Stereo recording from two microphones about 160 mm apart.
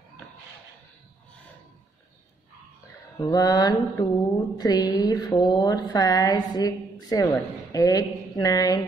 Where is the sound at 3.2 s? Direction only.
25° left (ahead or behind).